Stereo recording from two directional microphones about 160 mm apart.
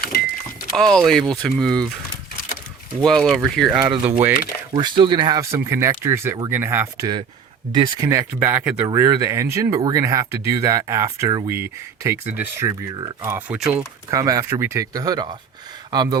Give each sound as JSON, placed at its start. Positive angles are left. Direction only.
{"t": 0.0, "sound": "thunk", "side_deg": 75}
{"t": 0.8, "sound": "speech", "side_deg": 0}
{"t": 3.0, "sound": "speech", "side_deg": 0}
{"t": 4.7, "sound": "speech", "side_deg": -25}
{"t": 13.3, "sound": "speech", "side_deg": -5}
{"t": 14.1, "sound": "speech", "side_deg": -20}